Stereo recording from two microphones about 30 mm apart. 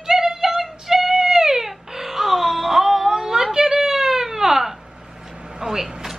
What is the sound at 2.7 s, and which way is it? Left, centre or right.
Whimper, centre.